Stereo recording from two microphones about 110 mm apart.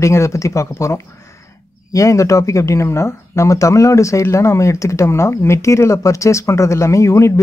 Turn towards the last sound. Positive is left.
turn(degrees=25)  # may be behind; listen again after turning